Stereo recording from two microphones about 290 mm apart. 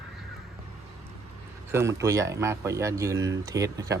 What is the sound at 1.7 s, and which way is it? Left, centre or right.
Speech, centre.